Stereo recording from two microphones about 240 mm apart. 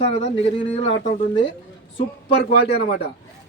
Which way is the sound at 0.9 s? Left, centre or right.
Left.